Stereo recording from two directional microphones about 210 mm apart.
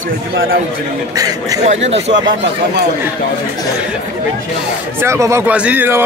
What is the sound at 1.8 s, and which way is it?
Speech, 30° right (ahead or behind).